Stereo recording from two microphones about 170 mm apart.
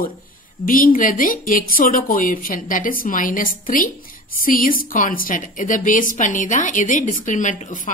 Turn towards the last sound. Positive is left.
turn(degrees=50)  # may be behind; listen again after turning